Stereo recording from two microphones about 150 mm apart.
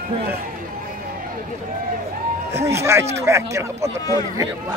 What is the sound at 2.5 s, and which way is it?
Speech, 20° right (ahead or behind).